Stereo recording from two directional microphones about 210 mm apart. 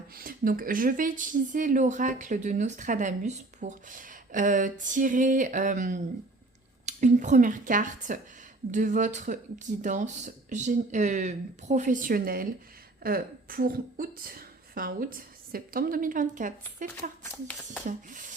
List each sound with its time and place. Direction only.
0.1 s a woman's voice: 45° right (ahead or behind)